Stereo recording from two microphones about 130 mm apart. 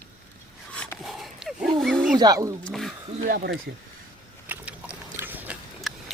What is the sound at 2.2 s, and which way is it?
Speech, 30° right (ahead or behind).